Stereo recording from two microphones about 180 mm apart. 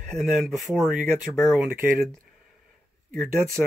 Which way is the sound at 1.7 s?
15° right (ahead or behind).